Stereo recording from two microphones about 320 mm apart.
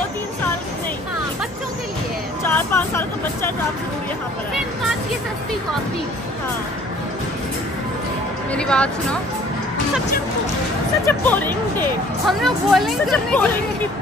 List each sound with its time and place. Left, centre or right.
2.4 s speech: centre
8.5 s speech: centre
11.1 s speech: centre